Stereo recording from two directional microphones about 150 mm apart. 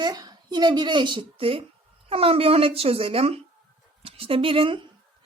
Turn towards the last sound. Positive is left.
turn(degrees=-35)  # may be behind; listen again after turning